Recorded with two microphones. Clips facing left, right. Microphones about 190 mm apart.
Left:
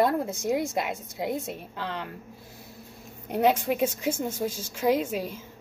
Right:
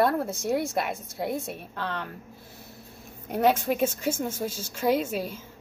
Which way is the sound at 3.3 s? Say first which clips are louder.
Even; 10° left (ahead or behind).